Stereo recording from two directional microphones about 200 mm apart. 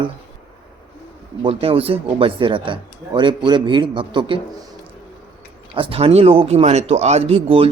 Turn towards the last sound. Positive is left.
turn(degrees=-30)  # may be behind; listen again after turning